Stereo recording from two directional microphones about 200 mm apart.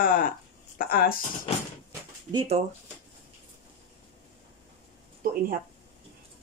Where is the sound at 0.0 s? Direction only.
45° left (ahead or behind).